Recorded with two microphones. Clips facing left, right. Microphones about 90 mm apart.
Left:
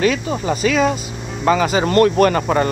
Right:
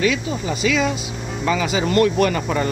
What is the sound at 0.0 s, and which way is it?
Speech, 40° left (ahead or behind).